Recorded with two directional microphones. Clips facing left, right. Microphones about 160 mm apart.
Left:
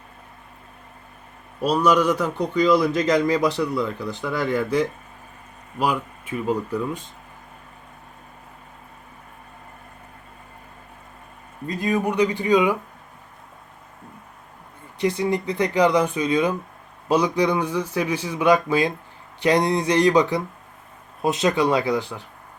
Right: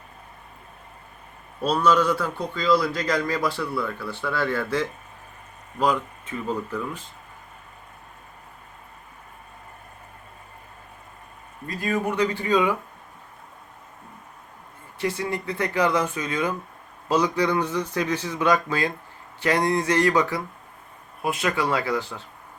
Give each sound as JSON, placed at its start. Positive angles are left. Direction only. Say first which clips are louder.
{"t": 1.6, "sound": "a man's voice", "louder": "left 2 dB", "side_deg": 15}
{"t": 11.6, "sound": "a man's voice", "louder": "left 3 dB", "side_deg": 20}
{"t": 14.9, "sound": "a man's voice", "louder": "left 5 dB", "side_deg": 15}